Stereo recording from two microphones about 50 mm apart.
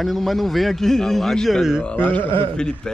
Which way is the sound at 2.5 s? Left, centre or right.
Centre.